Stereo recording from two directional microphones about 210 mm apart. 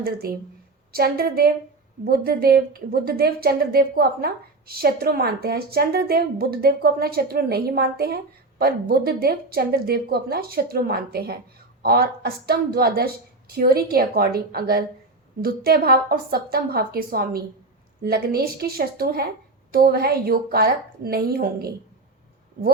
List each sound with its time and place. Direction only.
0.0 s a woman's voice: 45° right (ahead or behind)